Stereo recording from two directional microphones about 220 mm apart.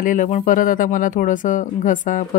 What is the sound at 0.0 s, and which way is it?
Speech, 35° left (ahead or behind).